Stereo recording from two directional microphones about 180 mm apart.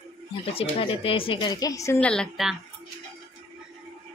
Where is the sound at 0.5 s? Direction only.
30° left (ahead or behind).